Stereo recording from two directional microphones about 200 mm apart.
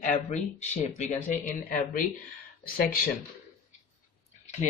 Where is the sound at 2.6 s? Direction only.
45° left (ahead or behind).